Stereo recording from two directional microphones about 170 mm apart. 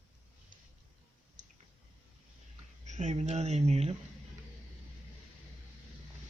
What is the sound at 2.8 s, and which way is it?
Speech, 45° right (ahead or behind).